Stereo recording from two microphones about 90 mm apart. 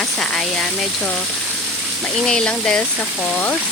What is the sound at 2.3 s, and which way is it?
Speech, 10° left (ahead or behind).